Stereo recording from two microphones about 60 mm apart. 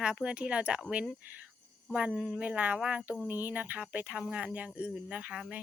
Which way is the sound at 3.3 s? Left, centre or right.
Right.